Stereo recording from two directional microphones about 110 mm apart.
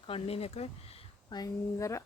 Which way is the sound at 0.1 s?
65° left (ahead or behind).